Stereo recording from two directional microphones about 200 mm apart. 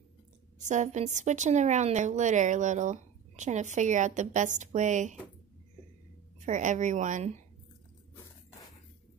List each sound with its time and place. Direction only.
0.6 s speech: 35° right (ahead or behind)
6.4 s speech: 40° right (ahead or behind)